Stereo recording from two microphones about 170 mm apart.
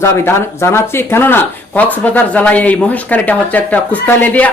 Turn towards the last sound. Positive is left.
turn(degrees=10)  # may be behind; listen again after turning